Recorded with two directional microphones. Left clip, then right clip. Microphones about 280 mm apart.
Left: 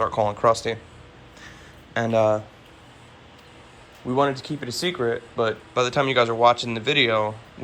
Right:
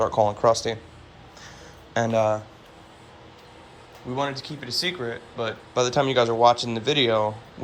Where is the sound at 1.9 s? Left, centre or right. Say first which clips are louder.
Left 2 dB; centre.